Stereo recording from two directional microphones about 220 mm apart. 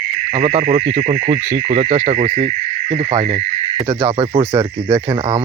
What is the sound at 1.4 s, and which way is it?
Owl, 20° right (ahead or behind).